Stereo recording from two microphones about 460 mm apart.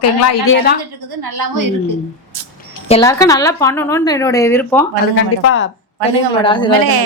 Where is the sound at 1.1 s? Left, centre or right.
Right.